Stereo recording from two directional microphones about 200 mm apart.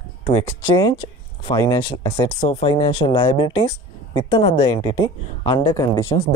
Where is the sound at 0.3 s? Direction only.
25° left (ahead or behind).